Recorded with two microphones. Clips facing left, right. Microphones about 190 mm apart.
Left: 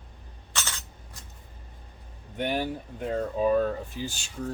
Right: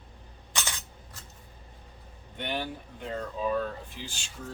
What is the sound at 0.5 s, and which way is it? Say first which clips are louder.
Coin: even; 15° right (ahead or behind).